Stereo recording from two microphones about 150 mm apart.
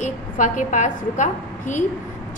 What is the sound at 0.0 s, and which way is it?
A woman's voice, 55° left (ahead or behind).